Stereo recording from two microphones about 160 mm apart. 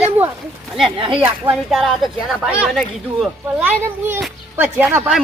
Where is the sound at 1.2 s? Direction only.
Centre (ahead or behind).